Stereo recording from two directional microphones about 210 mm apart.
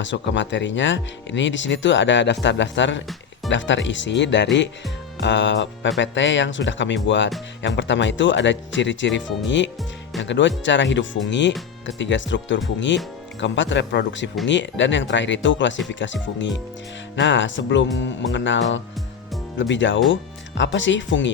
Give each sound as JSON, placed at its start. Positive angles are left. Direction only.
{"t": 0.0, "sound": "speech", "side_deg": 60}